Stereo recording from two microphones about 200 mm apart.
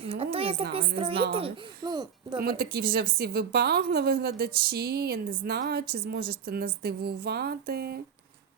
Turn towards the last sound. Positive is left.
turn(degrees=-50)  # may be behind; listen again after turning